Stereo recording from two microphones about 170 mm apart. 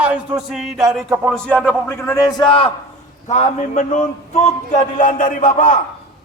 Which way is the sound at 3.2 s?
40° left (ahead or behind).